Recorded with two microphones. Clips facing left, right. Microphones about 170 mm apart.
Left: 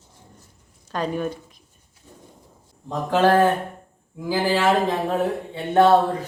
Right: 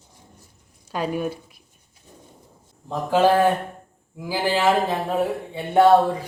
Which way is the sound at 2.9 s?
10° right (ahead or behind).